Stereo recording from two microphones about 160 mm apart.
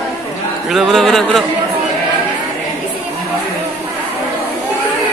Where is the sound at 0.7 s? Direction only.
Centre (ahead or behind).